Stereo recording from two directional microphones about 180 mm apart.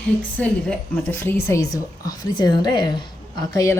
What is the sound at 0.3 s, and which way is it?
Speech, 5° left (ahead or behind).